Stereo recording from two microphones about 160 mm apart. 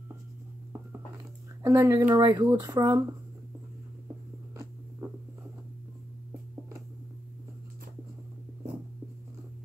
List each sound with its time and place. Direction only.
1.6 s speech: 20° right (ahead or behind)